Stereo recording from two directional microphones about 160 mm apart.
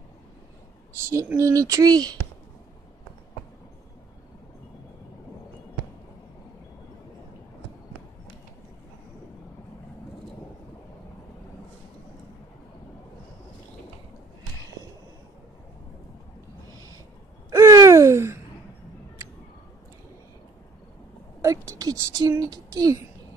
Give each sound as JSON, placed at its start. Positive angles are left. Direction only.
{"t": 1.0, "sound": "speech", "side_deg": -15}
{"t": 17.5, "sound": "gasp", "side_deg": -20}
{"t": 21.4, "sound": "a sound", "side_deg": -20}